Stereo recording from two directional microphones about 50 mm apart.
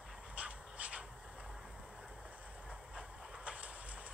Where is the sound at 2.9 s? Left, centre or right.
Right.